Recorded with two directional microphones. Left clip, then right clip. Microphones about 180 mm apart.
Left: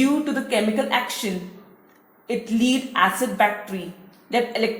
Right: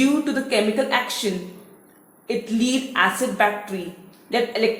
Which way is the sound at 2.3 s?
30° left (ahead or behind).